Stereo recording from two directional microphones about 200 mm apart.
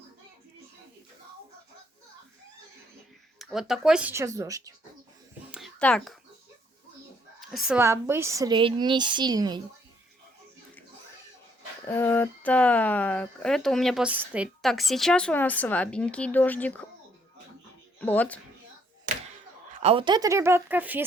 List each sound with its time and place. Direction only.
3.3 s speech: centre (ahead or behind)
5.5 s a sound: centre (ahead or behind)
7.7 s a woman's voice: 10° right (ahead or behind)
11.9 s speech: 10° left (ahead or behind)
18.0 s speech: 10° left (ahead or behind)
19.1 s a sound: 40° right (ahead or behind)
19.8 s speech: 25° right (ahead or behind); by 21.0 s 10° right (ahead or behind)